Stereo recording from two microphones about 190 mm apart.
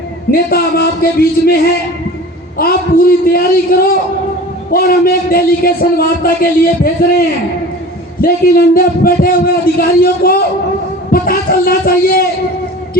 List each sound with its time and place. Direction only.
0.3 s a man's voice: 55° left (ahead or behind)